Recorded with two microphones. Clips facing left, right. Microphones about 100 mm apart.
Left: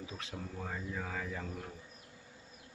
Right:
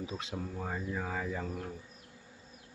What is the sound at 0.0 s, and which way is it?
Speech, 20° right (ahead or behind).